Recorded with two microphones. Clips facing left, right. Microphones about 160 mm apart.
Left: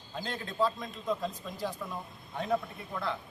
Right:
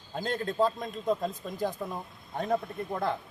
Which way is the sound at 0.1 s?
45° right (ahead or behind).